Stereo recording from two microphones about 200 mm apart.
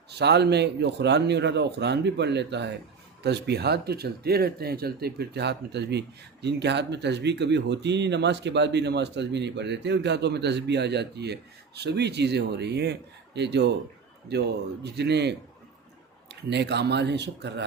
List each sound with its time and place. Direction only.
0.1 s speech: 55° right (ahead or behind)
14.8 s speech: 55° right (ahead or behind)